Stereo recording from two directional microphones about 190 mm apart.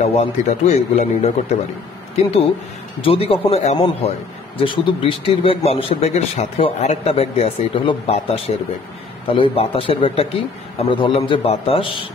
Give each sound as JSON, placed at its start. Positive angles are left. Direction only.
{"t": 0.0, "sound": "speech", "side_deg": 35}
{"t": 3.0, "sound": "a man's voice", "side_deg": 30}